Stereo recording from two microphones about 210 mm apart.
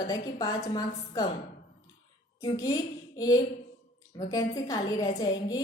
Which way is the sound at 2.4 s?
20° left (ahead or behind).